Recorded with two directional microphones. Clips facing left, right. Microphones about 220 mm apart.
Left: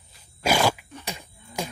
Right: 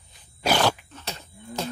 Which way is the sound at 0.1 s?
5° left (ahead or behind).